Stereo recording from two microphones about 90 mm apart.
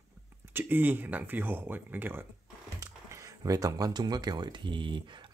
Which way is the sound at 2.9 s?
35° right (ahead or behind).